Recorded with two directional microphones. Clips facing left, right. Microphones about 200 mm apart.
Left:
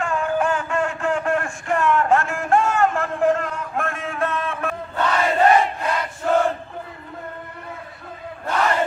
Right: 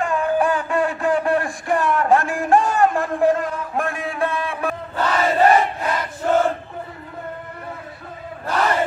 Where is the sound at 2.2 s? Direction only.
15° right (ahead or behind).